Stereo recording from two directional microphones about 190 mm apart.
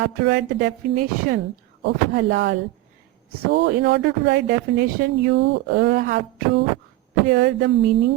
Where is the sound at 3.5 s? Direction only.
65° right (ahead or behind).